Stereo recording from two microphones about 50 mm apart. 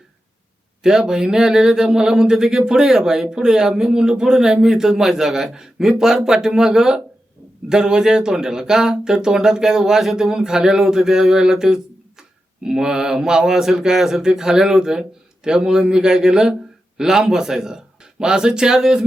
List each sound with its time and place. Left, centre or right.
0.8 s speech: centre
10.3 s speech: centre